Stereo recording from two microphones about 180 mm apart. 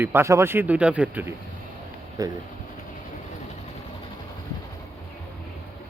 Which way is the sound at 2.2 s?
20° right (ahead or behind).